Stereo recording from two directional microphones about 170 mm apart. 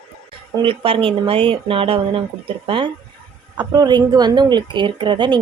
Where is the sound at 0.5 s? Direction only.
30° right (ahead or behind).